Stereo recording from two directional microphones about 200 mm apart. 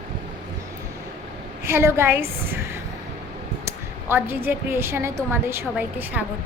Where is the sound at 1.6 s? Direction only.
15° right (ahead or behind).